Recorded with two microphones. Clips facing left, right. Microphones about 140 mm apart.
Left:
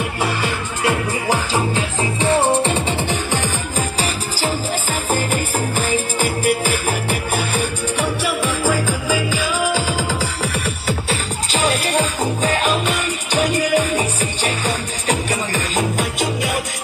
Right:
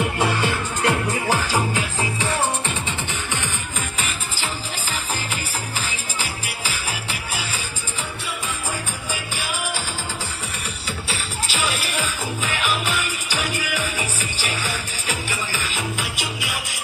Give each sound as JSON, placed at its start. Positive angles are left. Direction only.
{"t": 0.0, "sound": "music", "side_deg": -20}
{"t": 0.8, "sound": "music", "side_deg": 20}
{"t": 5.1, "sound": "music", "side_deg": 50}
{"t": 11.5, "sound": "music", "side_deg": 35}
{"t": 15.5, "sound": "music", "side_deg": 45}